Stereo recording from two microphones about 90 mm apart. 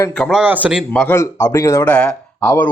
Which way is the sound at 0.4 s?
20° right (ahead or behind).